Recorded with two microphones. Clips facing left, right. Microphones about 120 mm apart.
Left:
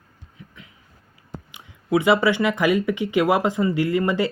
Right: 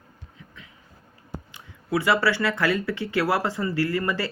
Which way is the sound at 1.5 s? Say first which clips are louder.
Left 5 dB; 20° left (ahead or behind).